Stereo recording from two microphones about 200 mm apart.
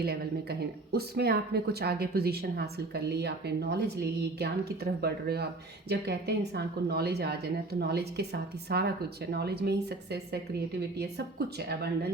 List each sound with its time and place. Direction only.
0.9 s speech: 50° right (ahead or behind)